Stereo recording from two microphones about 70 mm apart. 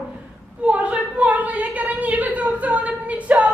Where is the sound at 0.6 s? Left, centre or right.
Centre.